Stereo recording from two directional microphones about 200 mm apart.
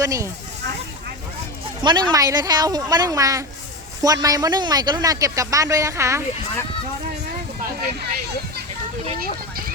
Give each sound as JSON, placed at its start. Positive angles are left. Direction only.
{"t": 0.0, "sound": "a man's voice", "side_deg": -15}
{"t": 1.8, "sound": "a man's voice", "side_deg": -20}
{"t": 7.6, "sound": "a sound", "side_deg": -55}